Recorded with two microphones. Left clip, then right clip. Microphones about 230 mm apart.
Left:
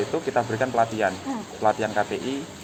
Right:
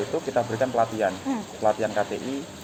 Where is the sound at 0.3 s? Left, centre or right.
Left.